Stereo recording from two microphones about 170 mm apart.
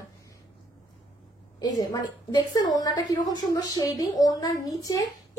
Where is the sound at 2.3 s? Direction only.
25° left (ahead or behind).